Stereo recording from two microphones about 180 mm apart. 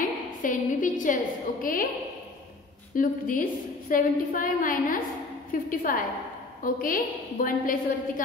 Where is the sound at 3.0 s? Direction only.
45° left (ahead or behind).